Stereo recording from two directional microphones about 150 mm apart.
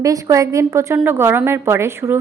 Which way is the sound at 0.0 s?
25° right (ahead or behind).